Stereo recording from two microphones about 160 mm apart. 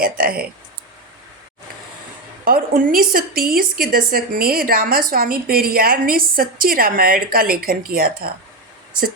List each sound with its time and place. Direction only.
0.0 s speech: 70° right (ahead or behind)
2.4 s a woman's voice: 60° right (ahead or behind)